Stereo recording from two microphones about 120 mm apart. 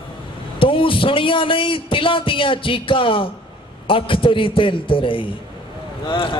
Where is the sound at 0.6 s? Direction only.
45° left (ahead or behind).